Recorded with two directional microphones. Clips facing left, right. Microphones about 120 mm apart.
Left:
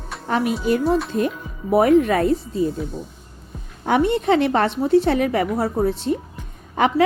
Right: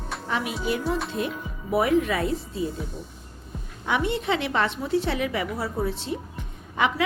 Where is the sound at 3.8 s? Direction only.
40° left (ahead or behind).